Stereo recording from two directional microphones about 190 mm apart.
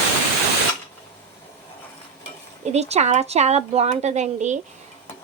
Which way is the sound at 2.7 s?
35° right (ahead or behind).